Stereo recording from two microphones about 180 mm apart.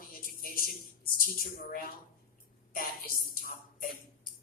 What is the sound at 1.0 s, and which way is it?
A woman's voice, 50° left (ahead or behind).